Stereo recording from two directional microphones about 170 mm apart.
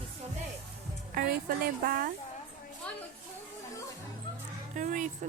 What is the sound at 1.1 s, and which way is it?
A woman's voice, 60° right (ahead or behind).